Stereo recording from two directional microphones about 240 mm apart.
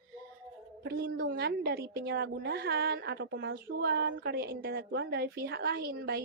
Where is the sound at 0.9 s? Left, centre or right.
Right.